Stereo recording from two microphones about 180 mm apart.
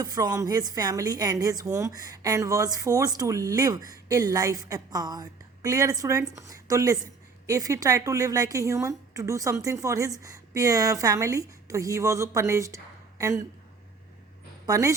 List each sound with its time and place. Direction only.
0.0 s a woman's voice: 20° right (ahead or behind)
14.7 s a woman's voice: 15° right (ahead or behind)